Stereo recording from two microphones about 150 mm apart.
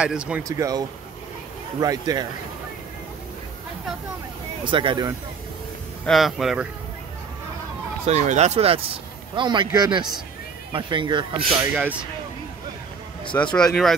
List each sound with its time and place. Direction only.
0.0 s speech: 5° right (ahead or behind)
0.4 s speech: 20° right (ahead or behind)
4.6 s speech: 35° right (ahead or behind)
6.0 s speech: centre (ahead or behind)
8.1 s speech: 50° right (ahead or behind); by 11.4 s 30° right (ahead or behind)
11.7 s speech: 10° right (ahead or behind)
13.2 s speech: 10° left (ahead or behind)